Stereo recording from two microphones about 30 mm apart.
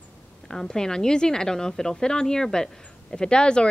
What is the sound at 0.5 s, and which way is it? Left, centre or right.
A woman's voice, centre.